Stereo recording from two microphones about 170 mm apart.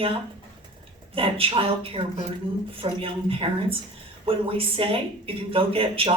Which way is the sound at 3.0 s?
35° right (ahead or behind).